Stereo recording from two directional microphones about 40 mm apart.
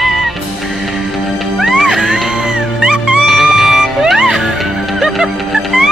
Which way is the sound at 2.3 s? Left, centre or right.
Right.